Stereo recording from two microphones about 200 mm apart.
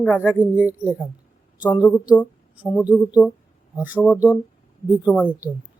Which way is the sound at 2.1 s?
5° right (ahead or behind).